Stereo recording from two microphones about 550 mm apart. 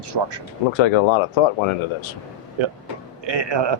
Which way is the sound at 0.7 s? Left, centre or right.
Left.